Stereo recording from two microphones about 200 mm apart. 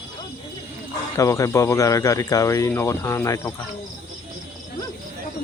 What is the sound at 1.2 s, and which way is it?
Speech, 15° left (ahead or behind).